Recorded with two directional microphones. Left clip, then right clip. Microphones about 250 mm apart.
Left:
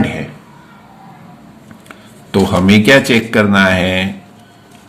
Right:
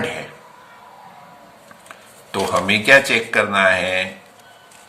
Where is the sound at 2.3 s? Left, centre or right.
Left.